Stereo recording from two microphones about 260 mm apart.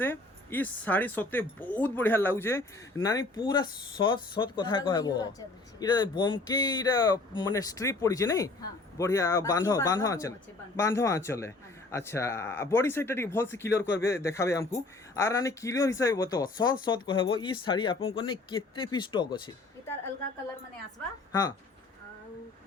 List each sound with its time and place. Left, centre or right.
0.0 s speech: centre